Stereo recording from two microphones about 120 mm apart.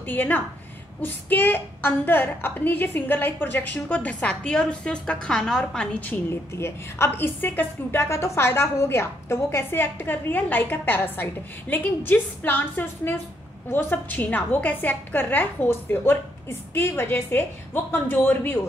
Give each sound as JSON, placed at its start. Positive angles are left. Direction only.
{"t": 0.0, "sound": "a woman's voice", "side_deg": 15}